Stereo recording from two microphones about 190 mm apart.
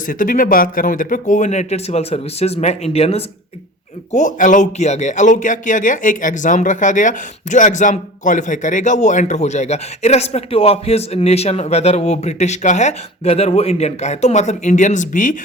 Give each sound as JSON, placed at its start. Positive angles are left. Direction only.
{"t": 0.1, "sound": "speech", "side_deg": 45}